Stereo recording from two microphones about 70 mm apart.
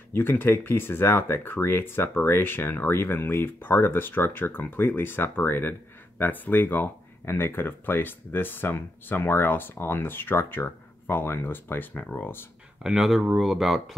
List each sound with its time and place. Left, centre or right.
0.1 s speech: left
12.8 s speech: centre